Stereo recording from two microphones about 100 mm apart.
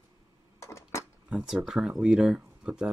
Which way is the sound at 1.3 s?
5° right (ahead or behind).